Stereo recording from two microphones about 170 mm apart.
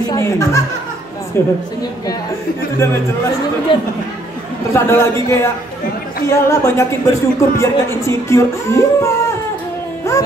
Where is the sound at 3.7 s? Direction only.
30° left (ahead or behind).